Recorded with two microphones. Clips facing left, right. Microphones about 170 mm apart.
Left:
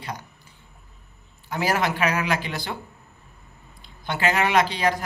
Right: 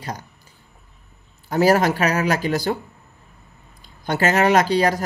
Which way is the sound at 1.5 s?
40° right (ahead or behind).